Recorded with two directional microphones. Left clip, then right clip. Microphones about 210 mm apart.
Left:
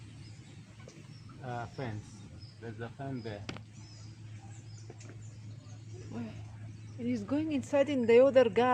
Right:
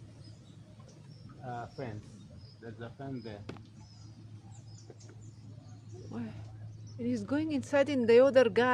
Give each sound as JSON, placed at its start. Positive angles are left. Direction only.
{"t": 1.5, "sound": "speech", "side_deg": 45}
{"t": 7.0, "sound": "speech", "side_deg": -5}